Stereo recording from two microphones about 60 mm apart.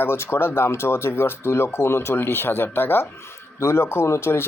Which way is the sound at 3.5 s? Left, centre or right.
Left.